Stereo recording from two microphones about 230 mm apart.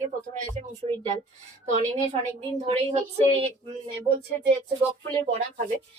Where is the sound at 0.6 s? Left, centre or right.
Right.